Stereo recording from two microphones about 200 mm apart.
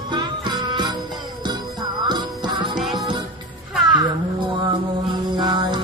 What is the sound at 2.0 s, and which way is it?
Music, 20° right (ahead or behind).